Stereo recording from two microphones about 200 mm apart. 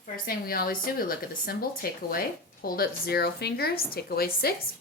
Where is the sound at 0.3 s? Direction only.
50° left (ahead or behind).